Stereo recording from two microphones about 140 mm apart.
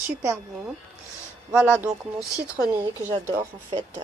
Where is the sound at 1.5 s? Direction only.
10° right (ahead or behind).